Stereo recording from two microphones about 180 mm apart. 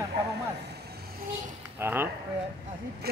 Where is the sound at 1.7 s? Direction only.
10° right (ahead or behind).